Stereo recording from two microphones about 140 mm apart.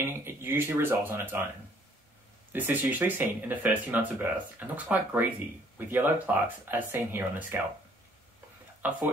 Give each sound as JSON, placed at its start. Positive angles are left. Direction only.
{"t": 0.0, "sound": "speech", "side_deg": -15}
{"t": 2.5, "sound": "speech", "side_deg": -10}
{"t": 8.8, "sound": "speech", "side_deg": -10}